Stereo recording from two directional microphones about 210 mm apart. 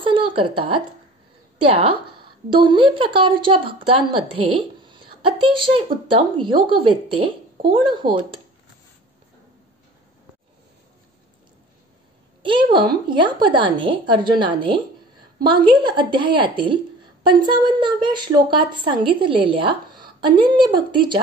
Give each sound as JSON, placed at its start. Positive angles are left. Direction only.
{"t": 0.0, "sound": "a woman's voice", "side_deg": -25}
{"t": 12.4, "sound": "a woman's voice", "side_deg": -25}